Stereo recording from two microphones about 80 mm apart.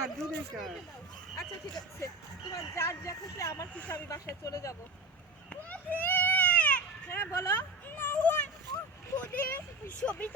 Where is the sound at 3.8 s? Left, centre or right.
Centre.